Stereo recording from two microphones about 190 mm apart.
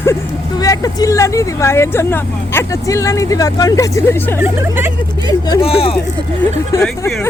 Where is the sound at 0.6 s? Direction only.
20° left (ahead or behind).